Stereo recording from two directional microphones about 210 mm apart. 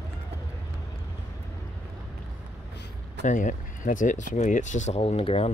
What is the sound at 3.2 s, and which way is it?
Speech, 35° left (ahead or behind).